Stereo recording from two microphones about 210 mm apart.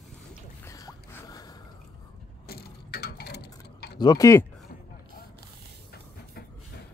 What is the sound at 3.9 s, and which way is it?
Speech, 20° left (ahead or behind).